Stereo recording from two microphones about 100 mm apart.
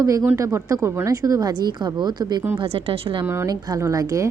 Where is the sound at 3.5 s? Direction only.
35° right (ahead or behind).